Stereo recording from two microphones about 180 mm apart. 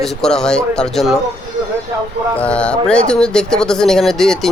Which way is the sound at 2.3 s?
5° left (ahead or behind).